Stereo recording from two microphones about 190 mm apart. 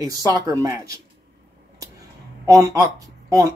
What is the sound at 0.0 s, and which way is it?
Speech, 20° right (ahead or behind).